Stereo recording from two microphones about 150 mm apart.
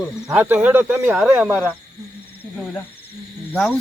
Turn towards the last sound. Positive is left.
turn(degrees=10)  # may be behind; listen again after turning